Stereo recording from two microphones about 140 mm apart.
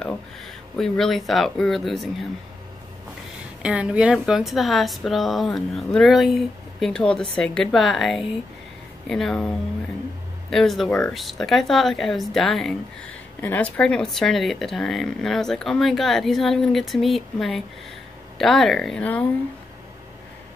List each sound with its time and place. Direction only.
0.7 s speech: 5° left (ahead or behind)
3.6 s speech: 10° right (ahead or behind); by 19.2 s 5° left (ahead or behind)